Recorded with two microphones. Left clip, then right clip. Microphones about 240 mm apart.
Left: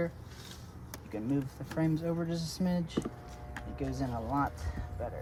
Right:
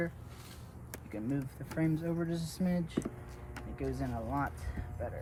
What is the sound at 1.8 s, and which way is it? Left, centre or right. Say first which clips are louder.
Speech: left 2 dB; left.